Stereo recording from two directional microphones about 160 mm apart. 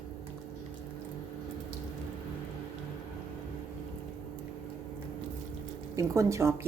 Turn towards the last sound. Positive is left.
turn(degrees=-20)  # may be behind; listen again after turning